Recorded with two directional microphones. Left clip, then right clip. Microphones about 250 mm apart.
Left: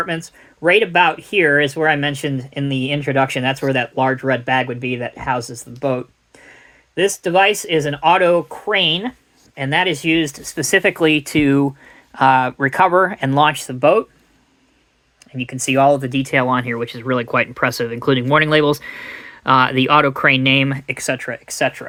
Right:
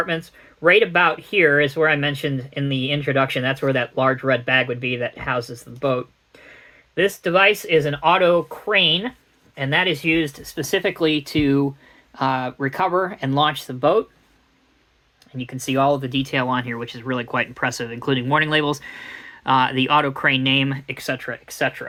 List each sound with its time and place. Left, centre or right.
0.0 s speech: left
15.4 s speech: left